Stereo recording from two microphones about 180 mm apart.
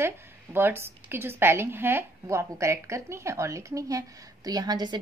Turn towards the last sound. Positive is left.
turn(degrees=-20)  # may be behind; listen again after turning